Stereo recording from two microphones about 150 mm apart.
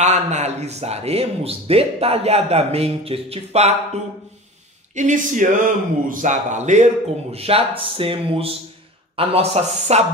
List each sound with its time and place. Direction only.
0.0 s speech: 50° right (ahead or behind)
4.9 s speech: 55° right (ahead or behind)
7.3 s speech: 40° right (ahead or behind)